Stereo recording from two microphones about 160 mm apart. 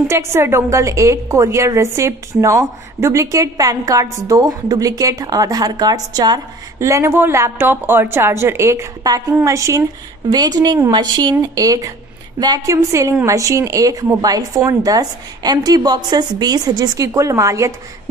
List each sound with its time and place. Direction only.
0.1 s a woman's voice: 15° right (ahead or behind)